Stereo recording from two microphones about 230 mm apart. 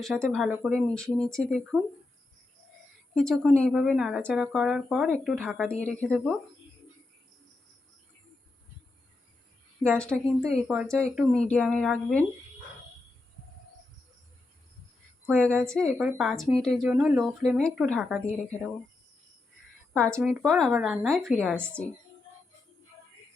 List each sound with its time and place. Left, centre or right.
0.2 s speech: centre
1.7 s speech: centre
3.2 s speech: centre
10.0 s speech: centre
15.7 s speech: centre
19.9 s speech: centre